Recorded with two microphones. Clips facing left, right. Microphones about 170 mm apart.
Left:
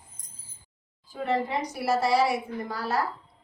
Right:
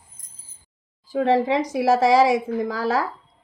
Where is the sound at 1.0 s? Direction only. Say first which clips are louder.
Right 9 dB; 90° right.